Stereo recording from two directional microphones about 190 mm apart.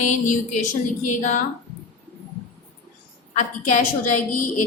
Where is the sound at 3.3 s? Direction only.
40° left (ahead or behind).